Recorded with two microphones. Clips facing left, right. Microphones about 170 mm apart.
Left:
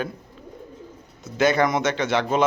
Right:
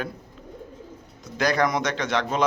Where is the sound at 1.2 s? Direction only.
5° left (ahead or behind).